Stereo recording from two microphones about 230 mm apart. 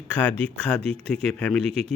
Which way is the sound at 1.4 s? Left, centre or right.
Centre.